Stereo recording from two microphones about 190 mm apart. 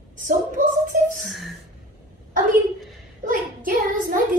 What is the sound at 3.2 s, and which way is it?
Child singing, 45° right (ahead or behind).